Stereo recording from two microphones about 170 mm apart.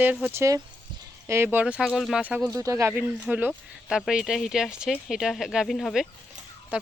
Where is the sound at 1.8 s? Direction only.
Centre (ahead or behind).